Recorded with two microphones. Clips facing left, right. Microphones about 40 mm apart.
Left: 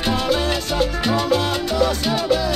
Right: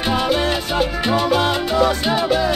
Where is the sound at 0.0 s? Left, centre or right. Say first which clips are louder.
Right 2 dB; centre.